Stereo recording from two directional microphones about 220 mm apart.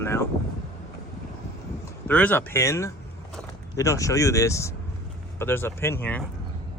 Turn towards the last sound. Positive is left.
turn(degrees=5)  # may be behind; listen again after turning